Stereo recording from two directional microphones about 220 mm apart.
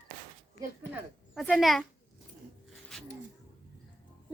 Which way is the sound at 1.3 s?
Centre (ahead or behind).